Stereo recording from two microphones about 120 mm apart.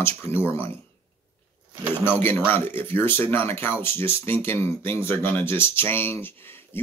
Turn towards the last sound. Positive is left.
turn(degrees=20)  # may be behind; listen again after turning